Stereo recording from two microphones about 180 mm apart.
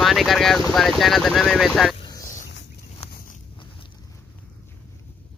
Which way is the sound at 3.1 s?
55° left (ahead or behind).